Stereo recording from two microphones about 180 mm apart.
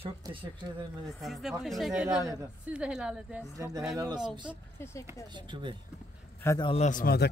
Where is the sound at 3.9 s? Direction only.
20° right (ahead or behind).